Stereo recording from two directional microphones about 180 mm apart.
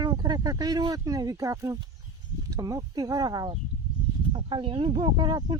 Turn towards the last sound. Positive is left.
turn(degrees=-25)  # may be behind; listen again after turning